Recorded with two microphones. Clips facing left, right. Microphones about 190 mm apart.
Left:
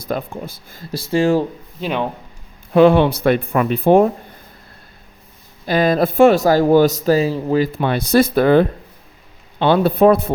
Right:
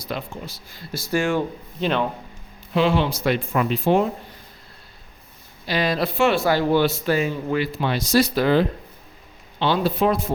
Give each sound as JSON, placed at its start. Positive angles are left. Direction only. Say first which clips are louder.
{"t": 0.0, "sound": "speech", "louder": "left 6 dB", "side_deg": 50}
{"t": 0.9, "sound": "speech", "louder": "left 6 dB", "side_deg": 30}
{"t": 1.8, "sound": "speech", "louder": "left 1 dB", "side_deg": 10}
{"t": 2.7, "sound": "speech", "louder": "left 9 dB", "side_deg": 55}
{"t": 5.6, "sound": "speech", "louder": "left 7 dB", "side_deg": 50}
{"t": 7.7, "sound": "speech", "louder": "left 5 dB", "side_deg": 55}